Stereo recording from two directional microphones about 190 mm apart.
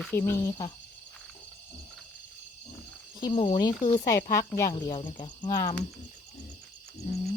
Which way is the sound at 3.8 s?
40° left (ahead or behind).